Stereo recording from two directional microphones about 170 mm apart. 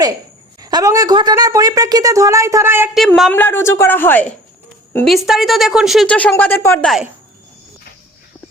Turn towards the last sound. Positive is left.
turn(degrees=0)  # may be behind; listen again after turning